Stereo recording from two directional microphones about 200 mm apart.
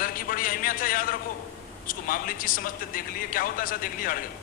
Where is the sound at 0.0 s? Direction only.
45° left (ahead or behind).